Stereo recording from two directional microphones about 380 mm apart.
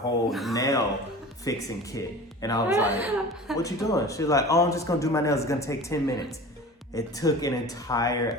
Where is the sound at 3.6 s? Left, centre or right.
Centre.